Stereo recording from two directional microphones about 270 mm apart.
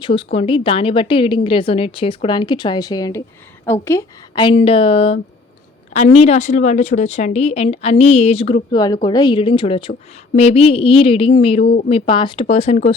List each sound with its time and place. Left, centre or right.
0.0 s a woman's voice: centre
11.6 s speech: left
11.9 s a woman's voice: left